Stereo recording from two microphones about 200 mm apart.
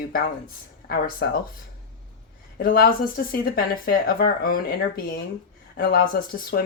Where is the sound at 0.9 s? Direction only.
50° left (ahead or behind).